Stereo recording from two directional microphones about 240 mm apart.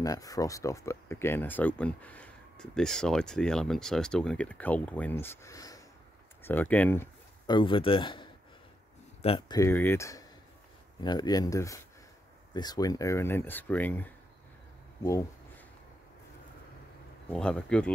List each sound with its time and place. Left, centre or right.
0.0 s speech: centre
15.0 s a sound: centre
17.3 s speech: centre